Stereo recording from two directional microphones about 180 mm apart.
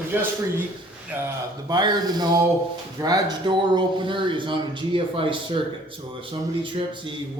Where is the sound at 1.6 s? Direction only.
25° right (ahead or behind).